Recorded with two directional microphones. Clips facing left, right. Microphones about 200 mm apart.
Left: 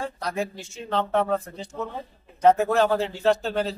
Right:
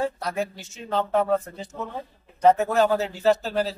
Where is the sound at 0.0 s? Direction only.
5° right (ahead or behind).